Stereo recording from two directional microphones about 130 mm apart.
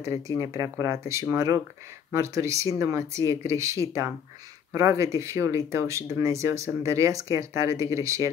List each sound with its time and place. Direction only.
0.4 s speech: 25° right (ahead or behind)